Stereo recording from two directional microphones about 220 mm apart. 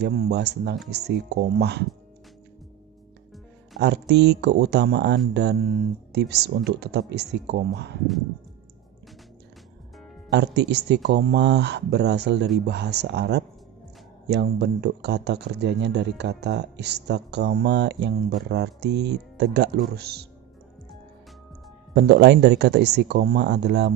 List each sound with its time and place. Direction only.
0.0 s speech: 45° right (ahead or behind)
3.8 s speech: 50° right (ahead or behind)
10.3 s speech: 50° right (ahead or behind)
21.9 s speech: 50° right (ahead or behind)